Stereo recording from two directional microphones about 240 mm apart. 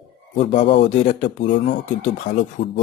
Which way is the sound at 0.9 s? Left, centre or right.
Left.